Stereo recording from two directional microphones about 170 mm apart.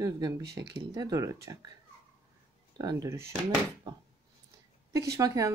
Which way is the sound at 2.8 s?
20° right (ahead or behind).